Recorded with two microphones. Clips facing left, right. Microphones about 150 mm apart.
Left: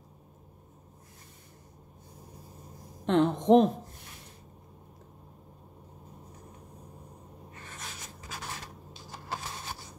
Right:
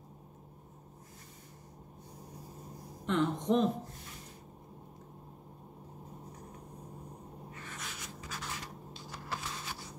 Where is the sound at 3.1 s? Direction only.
65° left (ahead or behind).